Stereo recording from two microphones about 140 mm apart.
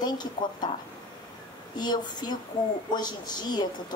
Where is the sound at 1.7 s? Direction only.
30° left (ahead or behind).